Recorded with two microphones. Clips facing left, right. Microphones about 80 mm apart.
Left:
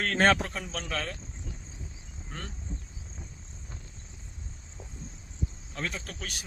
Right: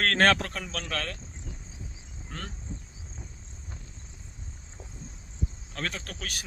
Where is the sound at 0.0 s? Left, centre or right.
Right.